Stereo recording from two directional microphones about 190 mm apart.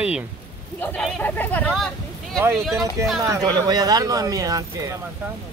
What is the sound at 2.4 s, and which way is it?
Speech, 10° right (ahead or behind).